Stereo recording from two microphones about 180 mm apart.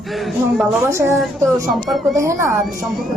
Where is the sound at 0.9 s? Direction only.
15° right (ahead or behind).